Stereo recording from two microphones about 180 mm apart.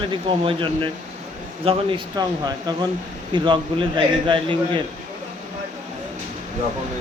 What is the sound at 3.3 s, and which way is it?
Speech, 25° right (ahead or behind).